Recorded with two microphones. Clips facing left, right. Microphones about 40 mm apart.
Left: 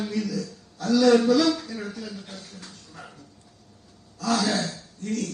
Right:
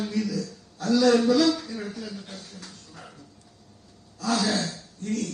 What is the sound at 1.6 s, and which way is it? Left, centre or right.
Speech, centre.